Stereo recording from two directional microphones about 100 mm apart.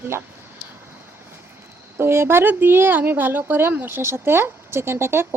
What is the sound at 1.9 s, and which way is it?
Speech, 25° right (ahead or behind).